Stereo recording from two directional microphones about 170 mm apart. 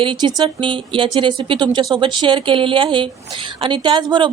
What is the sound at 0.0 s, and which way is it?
A woman's voice, 30° right (ahead or behind).